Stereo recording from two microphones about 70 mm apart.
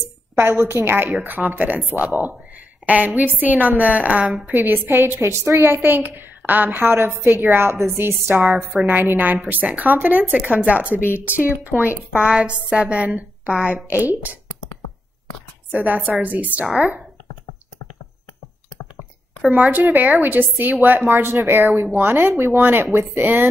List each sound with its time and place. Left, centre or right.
0.4 s a woman's voice: right
4.6 s a woman's voice: right; by 13.8 s centre
14.0 s speech: right
15.7 s speech: right
16.6 s a woman's voice: centre
19.6 s speech: right
21.1 s a woman's voice: right